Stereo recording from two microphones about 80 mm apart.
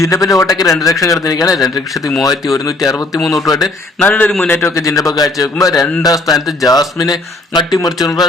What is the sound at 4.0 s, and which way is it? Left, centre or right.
Speech, left.